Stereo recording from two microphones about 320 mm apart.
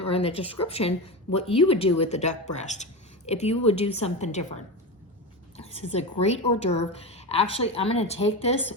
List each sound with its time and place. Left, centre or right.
0.0 s a woman's voice: centre
5.5 s a woman's voice: centre